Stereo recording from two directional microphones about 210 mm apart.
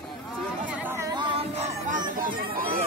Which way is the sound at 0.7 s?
10° right (ahead or behind).